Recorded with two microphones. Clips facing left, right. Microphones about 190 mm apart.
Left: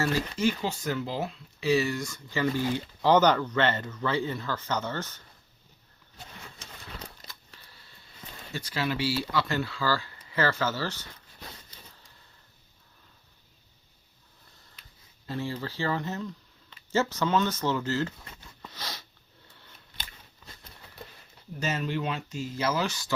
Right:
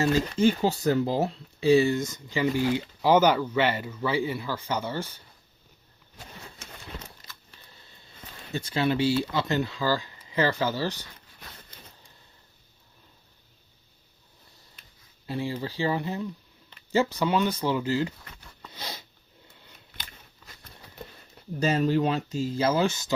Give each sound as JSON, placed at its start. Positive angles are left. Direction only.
{"t": 0.0, "sound": "speech", "side_deg": -20}
{"t": 0.4, "sound": "speech", "side_deg": -35}
{"t": 7.7, "sound": "a sound", "side_deg": -20}
{"t": 8.5, "sound": "speech", "side_deg": -25}
{"t": 15.3, "sound": "speech", "side_deg": -15}
{"t": 18.7, "sound": "a sound", "side_deg": -15}
{"t": 21.6, "sound": "speech", "side_deg": -35}